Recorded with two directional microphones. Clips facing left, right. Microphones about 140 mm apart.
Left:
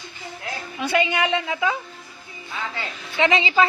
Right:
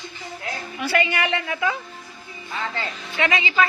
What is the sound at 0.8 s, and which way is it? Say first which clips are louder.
Speech: left 1 dB; 20° left (ahead or behind).